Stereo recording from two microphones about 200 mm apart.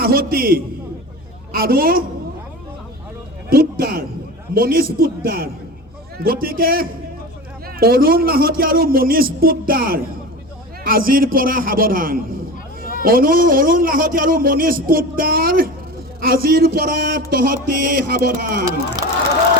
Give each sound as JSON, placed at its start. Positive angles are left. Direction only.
{"t": 0.0, "sound": "a man's voice", "side_deg": -45}
{"t": 3.5, "sound": "a man's voice", "side_deg": -50}